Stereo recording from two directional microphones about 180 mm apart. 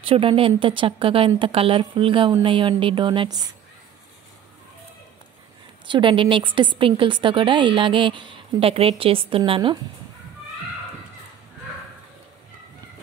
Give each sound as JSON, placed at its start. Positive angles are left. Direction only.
{"t": 0.0, "sound": "a woman's voice", "side_deg": -30}
{"t": 5.9, "sound": "a woman's voice", "side_deg": -25}